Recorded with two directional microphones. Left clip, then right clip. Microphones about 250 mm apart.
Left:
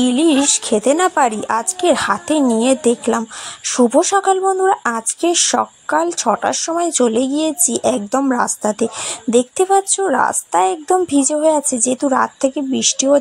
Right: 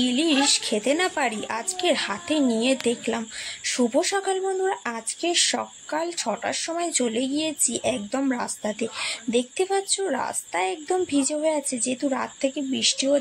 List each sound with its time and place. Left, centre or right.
0.0 s speech: left